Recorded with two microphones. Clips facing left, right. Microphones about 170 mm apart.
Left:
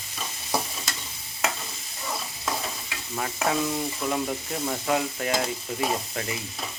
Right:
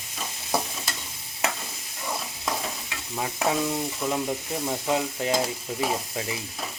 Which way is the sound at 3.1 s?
15° right (ahead or behind).